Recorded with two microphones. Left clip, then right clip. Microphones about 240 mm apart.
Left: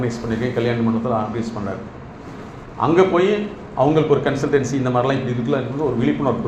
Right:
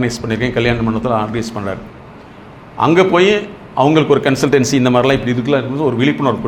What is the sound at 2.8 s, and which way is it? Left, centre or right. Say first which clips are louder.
A man's voice: right 5 dB; right.